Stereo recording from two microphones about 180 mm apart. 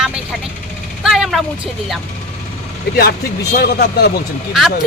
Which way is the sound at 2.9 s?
60° left (ahead or behind).